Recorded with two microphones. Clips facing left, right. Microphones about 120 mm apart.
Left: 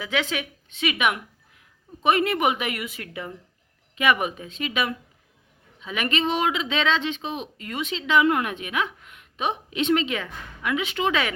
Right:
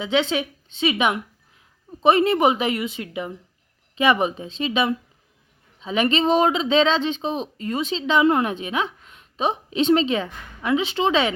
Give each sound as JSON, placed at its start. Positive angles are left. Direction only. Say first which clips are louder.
{"t": 0.0, "sound": "a woman's voice", "louder": "right 6 dB", "side_deg": -25}